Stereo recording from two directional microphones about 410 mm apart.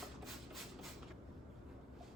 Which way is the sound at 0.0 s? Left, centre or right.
Centre.